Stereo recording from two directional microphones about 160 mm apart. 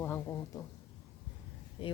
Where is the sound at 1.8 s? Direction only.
35° left (ahead or behind).